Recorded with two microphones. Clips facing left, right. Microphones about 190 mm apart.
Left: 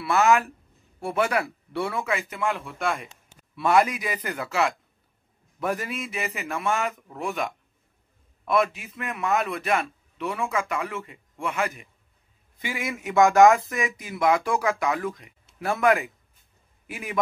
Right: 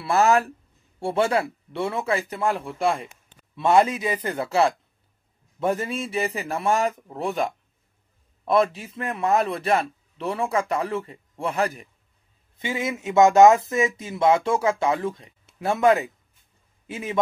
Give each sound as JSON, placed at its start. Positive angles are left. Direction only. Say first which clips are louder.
{"t": 0.0, "sound": "a man's voice", "louder": "right 1 dB", "side_deg": -35}
{"t": 12.5, "sound": "a man's voice", "louder": "right 4 dB", "side_deg": -25}